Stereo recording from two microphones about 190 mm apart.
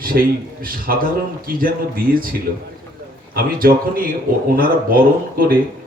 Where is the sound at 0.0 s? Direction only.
50° right (ahead or behind).